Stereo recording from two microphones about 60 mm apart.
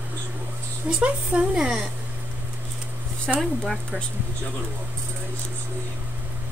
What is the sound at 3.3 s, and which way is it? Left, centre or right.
Speech, centre.